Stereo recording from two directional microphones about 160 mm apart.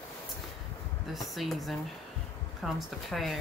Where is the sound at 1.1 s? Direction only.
Centre (ahead or behind).